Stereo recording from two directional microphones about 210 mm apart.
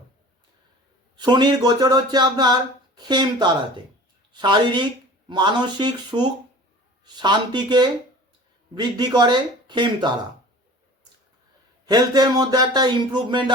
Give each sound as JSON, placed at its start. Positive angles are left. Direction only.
{"t": 1.1, "sound": "a woman's voice", "side_deg": -20}
{"t": 11.9, "sound": "speech", "side_deg": -20}